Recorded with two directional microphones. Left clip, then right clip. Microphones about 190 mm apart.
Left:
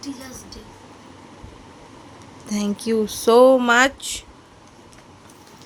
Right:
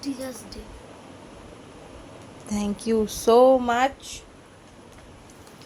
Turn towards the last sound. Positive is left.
turn(degrees=30)  # may be behind; listen again after turning